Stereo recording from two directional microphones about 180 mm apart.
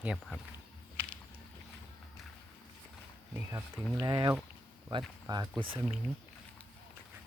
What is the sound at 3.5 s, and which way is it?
Speech, 15° right (ahead or behind).